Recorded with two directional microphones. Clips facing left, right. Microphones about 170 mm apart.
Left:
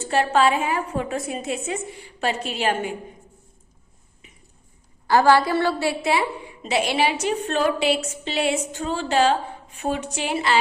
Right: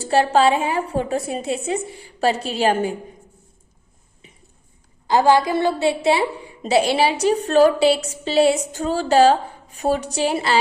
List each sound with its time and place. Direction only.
0.0 s a woman's voice: 35° right (ahead or behind)
5.0 s a woman's voice: 20° right (ahead or behind); by 10.6 s 35° right (ahead or behind)